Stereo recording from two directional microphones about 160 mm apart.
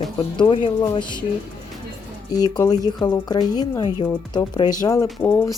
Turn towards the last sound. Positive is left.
turn(degrees=15)  # may be behind; listen again after turning